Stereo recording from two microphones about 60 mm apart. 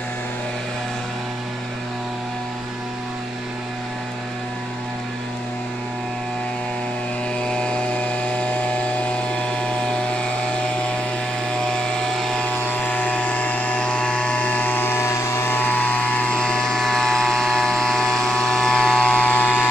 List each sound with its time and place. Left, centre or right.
7.3 s chainsaw: centre
11.5 s vehicle: centre
12.4 s vehicle: left